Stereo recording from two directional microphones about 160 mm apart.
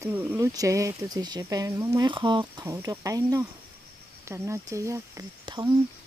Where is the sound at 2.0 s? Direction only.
30° right (ahead or behind).